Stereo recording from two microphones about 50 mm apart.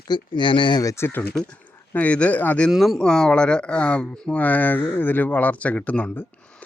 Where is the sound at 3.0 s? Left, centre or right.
Centre.